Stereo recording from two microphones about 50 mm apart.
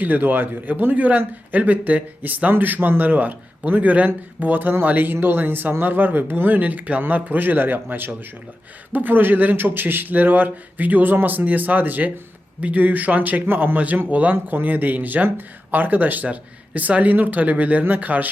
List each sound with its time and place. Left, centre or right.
0.0 s speech: right